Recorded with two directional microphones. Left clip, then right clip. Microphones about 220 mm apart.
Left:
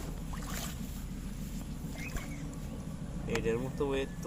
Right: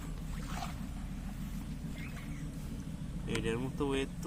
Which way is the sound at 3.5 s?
50° right (ahead or behind).